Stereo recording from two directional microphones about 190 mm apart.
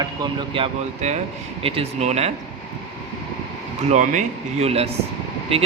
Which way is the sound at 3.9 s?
40° right (ahead or behind).